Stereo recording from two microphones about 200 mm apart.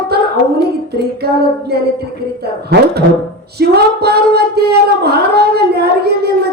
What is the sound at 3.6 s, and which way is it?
Speech, 55° right (ahead or behind).